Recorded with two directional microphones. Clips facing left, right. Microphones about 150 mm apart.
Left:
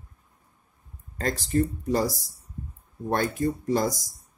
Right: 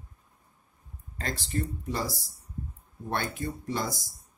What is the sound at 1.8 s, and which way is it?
Speech, 40° left (ahead or behind).